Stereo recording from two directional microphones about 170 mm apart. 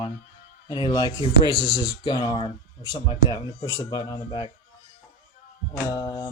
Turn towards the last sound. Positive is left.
turn(degrees=20)  # may be behind; listen again after turning